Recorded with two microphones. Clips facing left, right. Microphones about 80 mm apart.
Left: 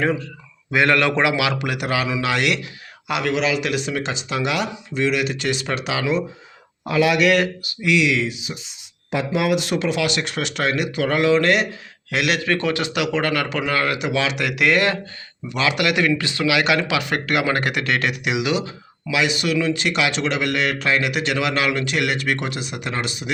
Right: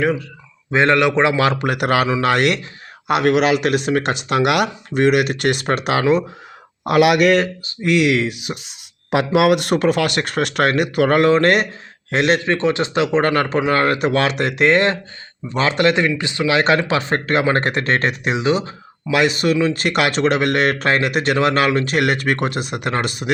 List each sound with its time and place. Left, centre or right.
0.7 s speech: right
1.3 s speech: right
6.8 s a man's voice: right
7.2 s speech: right
14.4 s speech: right
16.5 s speech: right
19.1 s speech: right